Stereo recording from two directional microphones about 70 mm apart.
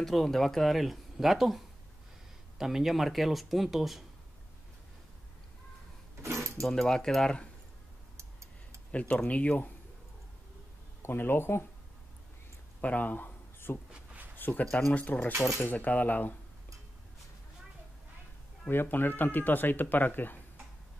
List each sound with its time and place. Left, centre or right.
0.0 s speech: centre
2.6 s speech: centre
6.2 s keys jangling: right
6.6 s speech: centre
8.9 s speech: centre
11.0 s speech: left
12.8 s a sound: left
14.7 s speech: centre
15.0 s speech: left
18.7 s speech: left